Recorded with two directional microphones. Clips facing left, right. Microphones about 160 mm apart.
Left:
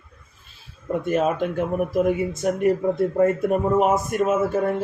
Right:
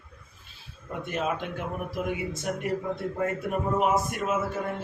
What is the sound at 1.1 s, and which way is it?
Speech, 45° left (ahead or behind).